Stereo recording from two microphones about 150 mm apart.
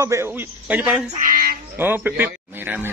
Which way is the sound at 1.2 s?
75° right (ahead or behind).